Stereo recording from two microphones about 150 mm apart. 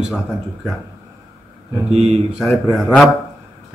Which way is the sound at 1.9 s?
45° right (ahead or behind).